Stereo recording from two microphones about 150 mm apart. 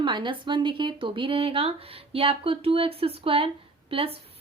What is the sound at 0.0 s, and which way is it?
Speech, 30° right (ahead or behind).